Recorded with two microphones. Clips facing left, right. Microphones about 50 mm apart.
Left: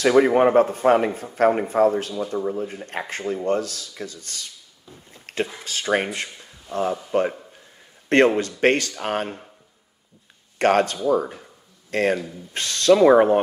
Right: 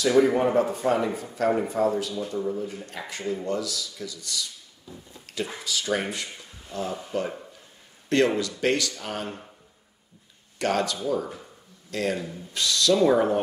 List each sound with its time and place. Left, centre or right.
0.0 s a man's voice: left
5.1 s a sound: left
5.6 s a man's voice: left
8.4 s a man's voice: left
10.6 s a man's voice: left